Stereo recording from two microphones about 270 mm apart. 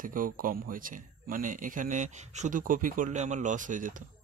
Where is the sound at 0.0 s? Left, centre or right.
Right.